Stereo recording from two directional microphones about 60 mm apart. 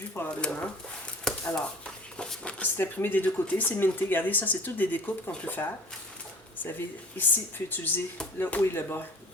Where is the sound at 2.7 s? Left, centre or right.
Left.